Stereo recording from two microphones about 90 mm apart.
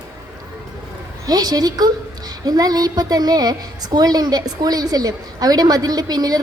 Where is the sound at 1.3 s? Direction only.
45° right (ahead or behind).